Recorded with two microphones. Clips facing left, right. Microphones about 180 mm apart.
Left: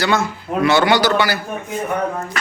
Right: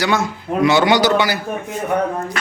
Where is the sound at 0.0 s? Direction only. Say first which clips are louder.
Even; 15° right (ahead or behind).